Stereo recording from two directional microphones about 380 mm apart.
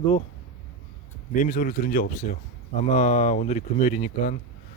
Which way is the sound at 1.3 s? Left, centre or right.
Left.